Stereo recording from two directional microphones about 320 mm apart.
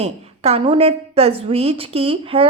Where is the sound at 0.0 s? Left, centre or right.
Centre.